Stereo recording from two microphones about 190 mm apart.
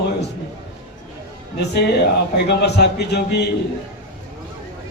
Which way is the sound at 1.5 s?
60° left (ahead or behind).